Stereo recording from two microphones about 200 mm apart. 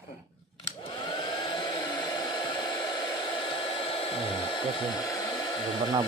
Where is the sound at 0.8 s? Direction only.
25° left (ahead or behind).